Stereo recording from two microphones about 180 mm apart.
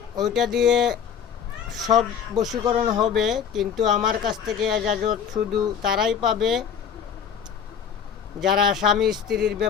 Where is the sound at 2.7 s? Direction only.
40° right (ahead or behind).